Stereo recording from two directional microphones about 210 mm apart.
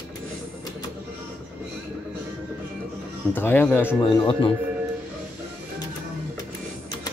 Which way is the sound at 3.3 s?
10° left (ahead or behind).